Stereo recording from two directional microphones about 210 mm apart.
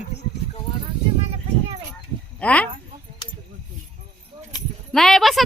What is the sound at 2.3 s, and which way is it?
Speech, 5° left (ahead or behind).